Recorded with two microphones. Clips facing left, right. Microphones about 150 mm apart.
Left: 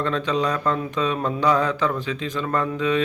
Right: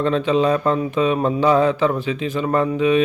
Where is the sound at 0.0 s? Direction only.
20° right (ahead or behind).